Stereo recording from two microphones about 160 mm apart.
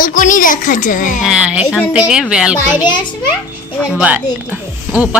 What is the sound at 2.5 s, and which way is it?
Speech, 25° left (ahead or behind).